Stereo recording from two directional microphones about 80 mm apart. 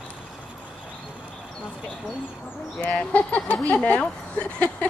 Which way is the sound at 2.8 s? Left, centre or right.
Centre.